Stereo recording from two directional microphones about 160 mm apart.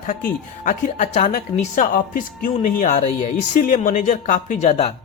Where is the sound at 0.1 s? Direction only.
55° left (ahead or behind).